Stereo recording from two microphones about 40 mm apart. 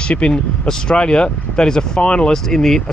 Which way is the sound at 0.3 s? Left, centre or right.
Centre.